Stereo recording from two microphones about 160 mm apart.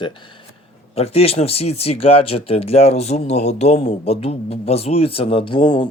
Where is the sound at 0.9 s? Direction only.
40° left (ahead or behind).